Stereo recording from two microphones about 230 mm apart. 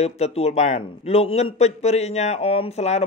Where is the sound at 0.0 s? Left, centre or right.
Left.